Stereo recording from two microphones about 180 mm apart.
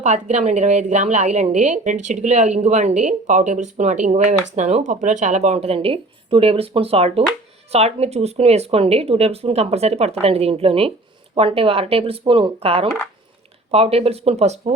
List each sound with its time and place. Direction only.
0.0 s a woman's voice: 40° right (ahead or behind)